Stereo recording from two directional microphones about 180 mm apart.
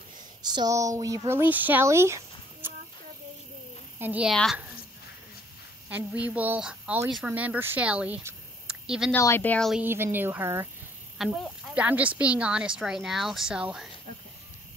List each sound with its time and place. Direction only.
0.4 s speech: 25° right (ahead or behind)
4.0 s a woman's voice: 5° right (ahead or behind)
5.9 s speech: 10° right (ahead or behind)
9.1 s speech: 15° left (ahead or behind)
9.8 s a woman's voice: 10° right (ahead or behind)
11.1 s speech: centre (ahead or behind)